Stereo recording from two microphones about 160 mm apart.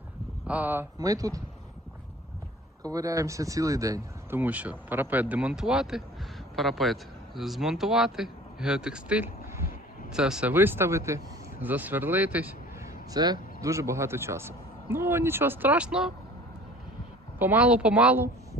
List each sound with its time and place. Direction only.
0.4 s speech: 10° right (ahead or behind)
0.9 s speech: 20° right (ahead or behind)
2.8 s speech: 20° right (ahead or behind)
13.1 s speech: 25° right (ahead or behind); by 16.1 s 5° right (ahead or behind)
17.4 s speech: 10° right (ahead or behind)